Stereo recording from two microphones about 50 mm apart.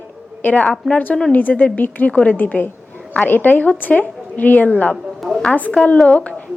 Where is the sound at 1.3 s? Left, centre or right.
Left.